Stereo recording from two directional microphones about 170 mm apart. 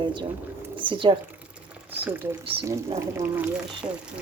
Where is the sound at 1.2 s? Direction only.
5° right (ahead or behind).